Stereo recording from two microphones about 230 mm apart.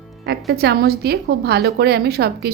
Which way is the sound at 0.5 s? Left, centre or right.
Right.